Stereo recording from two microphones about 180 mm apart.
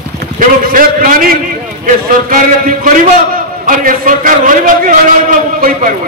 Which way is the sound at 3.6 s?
50° right (ahead or behind).